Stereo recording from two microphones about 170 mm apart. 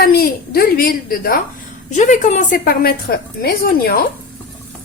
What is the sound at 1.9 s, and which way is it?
A woman's voice, 45° left (ahead or behind).